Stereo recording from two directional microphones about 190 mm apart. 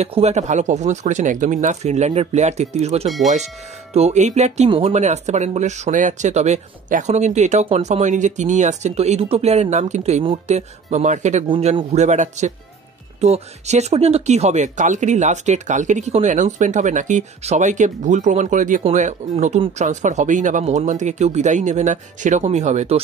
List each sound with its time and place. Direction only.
0.0 s speech: 35° right (ahead or behind)